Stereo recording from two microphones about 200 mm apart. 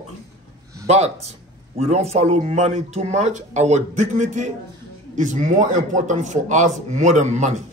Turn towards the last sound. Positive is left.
turn(degrees=-35)  # may be behind; listen again after turning